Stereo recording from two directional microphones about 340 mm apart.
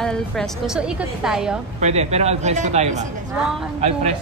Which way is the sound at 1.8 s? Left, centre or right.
Centre.